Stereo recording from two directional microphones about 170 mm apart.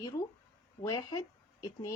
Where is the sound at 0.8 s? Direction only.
25° left (ahead or behind).